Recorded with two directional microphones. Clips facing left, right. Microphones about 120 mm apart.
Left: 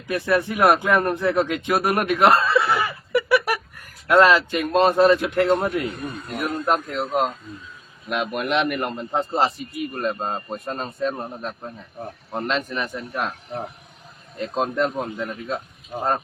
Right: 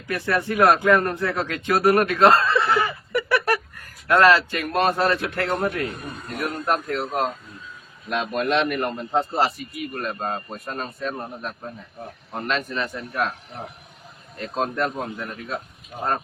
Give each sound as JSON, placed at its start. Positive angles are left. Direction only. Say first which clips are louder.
{"t": 0.1, "sound": "a man's voice", "louder": "left 2 dB", "side_deg": 15}
{"t": 2.5, "sound": "a sound", "louder": "even", "side_deg": 5}
{"t": 4.1, "sound": "a man's voice", "louder": "left 1 dB", "side_deg": 20}
{"t": 12.3, "sound": "a man's voice", "louder": "left 1 dB", "side_deg": 20}
{"t": 14.3, "sound": "a man's voice", "louder": "left 2 dB", "side_deg": 20}